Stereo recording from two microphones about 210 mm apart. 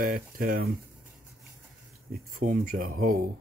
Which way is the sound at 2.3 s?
40° right (ahead or behind).